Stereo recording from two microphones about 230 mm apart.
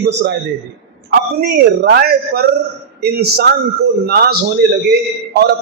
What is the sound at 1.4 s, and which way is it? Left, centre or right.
A man's voice, right.